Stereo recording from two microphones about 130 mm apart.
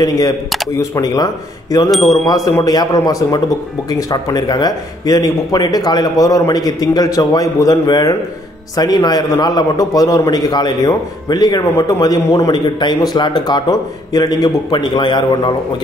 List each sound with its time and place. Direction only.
0.0 s speech: 30° left (ahead or behind)
1.9 s speech: centre (ahead or behind)
2.4 s a man's voice: 25° left (ahead or behind)